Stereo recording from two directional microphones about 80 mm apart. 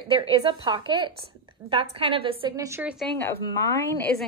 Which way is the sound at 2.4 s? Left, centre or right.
Right.